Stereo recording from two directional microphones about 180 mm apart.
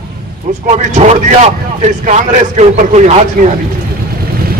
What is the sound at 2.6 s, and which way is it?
Speech, 40° right (ahead or behind).